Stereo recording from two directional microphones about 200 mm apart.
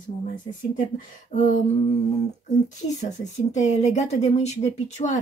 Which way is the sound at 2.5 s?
35° left (ahead or behind).